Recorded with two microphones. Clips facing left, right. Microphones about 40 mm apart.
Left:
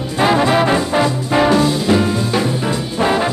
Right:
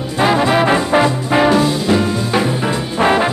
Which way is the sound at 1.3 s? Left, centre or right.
Centre.